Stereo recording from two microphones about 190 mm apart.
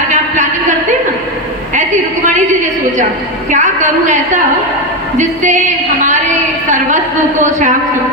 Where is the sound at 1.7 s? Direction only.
40° right (ahead or behind).